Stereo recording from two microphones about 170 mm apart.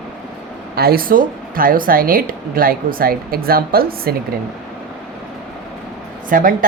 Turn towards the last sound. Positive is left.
turn(degrees=-55)  # may be behind; listen again after turning